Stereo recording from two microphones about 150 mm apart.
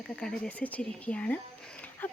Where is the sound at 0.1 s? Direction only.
5° left (ahead or behind).